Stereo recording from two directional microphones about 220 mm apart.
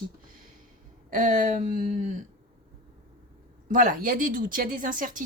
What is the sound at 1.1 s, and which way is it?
Speech, 35° right (ahead or behind).